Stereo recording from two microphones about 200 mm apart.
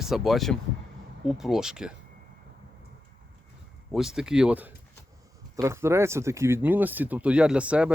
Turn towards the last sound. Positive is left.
turn(degrees=-5)  # may be behind; listen again after turning